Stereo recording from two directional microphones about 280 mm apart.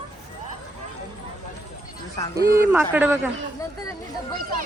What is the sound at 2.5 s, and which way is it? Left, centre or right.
Speech, centre.